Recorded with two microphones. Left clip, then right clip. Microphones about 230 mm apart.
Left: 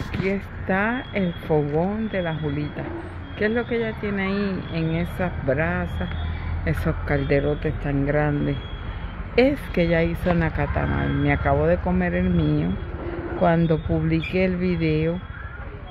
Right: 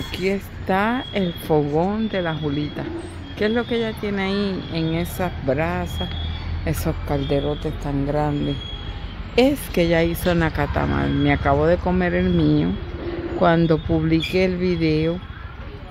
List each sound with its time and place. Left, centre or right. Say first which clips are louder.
0.1 s speech: right 2 dB; centre
9.3 s speech: right 1 dB; centre
9.8 s speech: right 4 dB; centre